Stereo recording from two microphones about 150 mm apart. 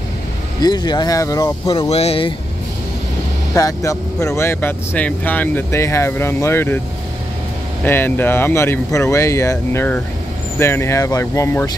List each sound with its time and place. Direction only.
0.6 s speech: 30° left (ahead or behind)
1.7 s speech: 40° left (ahead or behind)
3.5 s speech: 20° left (ahead or behind)
7.8 s speech: 15° left (ahead or behind)